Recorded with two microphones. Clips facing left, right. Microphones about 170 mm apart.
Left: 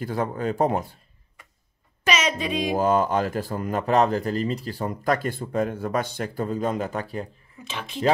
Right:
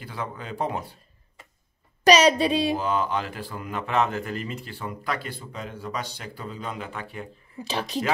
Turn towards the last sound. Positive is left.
turn(degrees=-40)  # may be behind; listen again after turning